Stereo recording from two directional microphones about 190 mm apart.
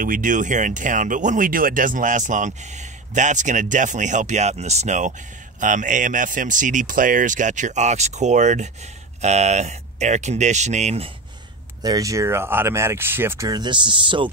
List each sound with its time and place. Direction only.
0.0 s speech: 45° right (ahead or behind)
11.8 s speech: 20° right (ahead or behind)